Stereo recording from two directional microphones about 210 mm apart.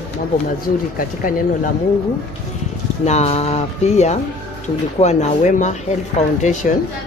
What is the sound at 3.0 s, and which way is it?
Speech, 30° left (ahead or behind).